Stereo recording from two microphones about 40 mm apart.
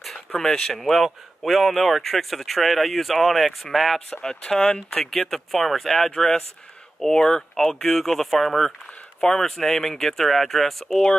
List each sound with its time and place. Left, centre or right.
0.3 s speech: centre
4.6 s speech: centre
5.0 s speech: centre